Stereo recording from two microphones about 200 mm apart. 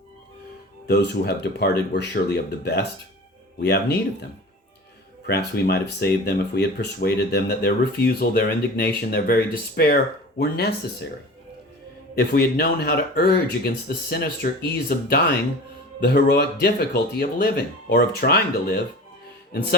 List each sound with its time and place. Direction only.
0.9 s speech: 55° left (ahead or behind)
12.1 s speech: 50° left (ahead or behind)